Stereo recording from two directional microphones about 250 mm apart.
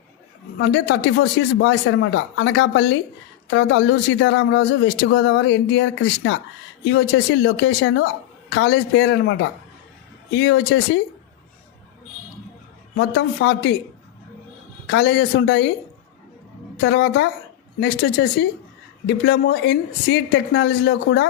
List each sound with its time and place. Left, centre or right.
0.6 s speech: left
13.0 s speech: left
14.8 s speech: left
16.7 s speech: left